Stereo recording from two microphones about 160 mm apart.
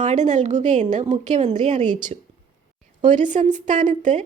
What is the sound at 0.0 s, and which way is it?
A woman's voice, 50° right (ahead or behind).